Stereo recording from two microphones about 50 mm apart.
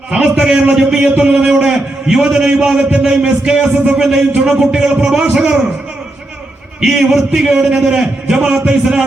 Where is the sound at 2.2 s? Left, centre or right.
Centre.